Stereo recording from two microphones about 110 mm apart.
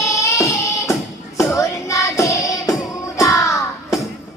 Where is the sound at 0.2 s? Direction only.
30° left (ahead or behind).